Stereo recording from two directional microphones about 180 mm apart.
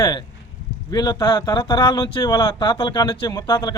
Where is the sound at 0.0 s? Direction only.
25° left (ahead or behind).